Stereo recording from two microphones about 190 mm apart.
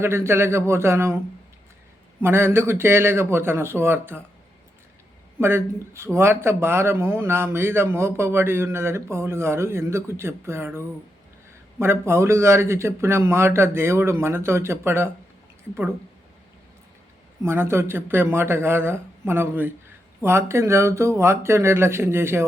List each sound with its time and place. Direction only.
0.0 s a man's voice: 15° right (ahead or behind)
2.2 s a man's voice: 10° right (ahead or behind)
5.4 s a man's voice: 15° right (ahead or behind)
17.4 s a man's voice: 15° right (ahead or behind)